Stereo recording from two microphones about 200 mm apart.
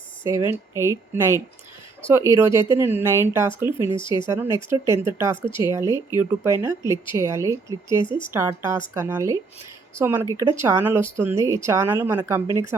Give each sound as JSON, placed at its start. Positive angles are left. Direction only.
{"t": 0.3, "sound": "speech", "side_deg": -15}
{"t": 3.7, "sound": "speech", "side_deg": 25}
{"t": 4.3, "sound": "speech", "side_deg": -15}